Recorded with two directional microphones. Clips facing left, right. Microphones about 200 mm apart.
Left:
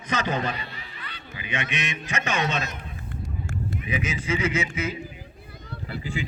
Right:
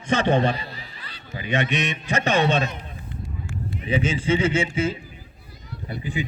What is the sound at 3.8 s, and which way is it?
A man's voice, 30° right (ahead or behind).